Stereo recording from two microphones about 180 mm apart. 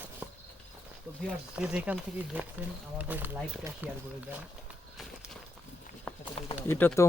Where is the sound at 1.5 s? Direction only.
5° right (ahead or behind).